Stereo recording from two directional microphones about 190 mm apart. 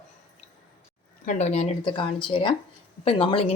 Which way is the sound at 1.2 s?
40° left (ahead or behind).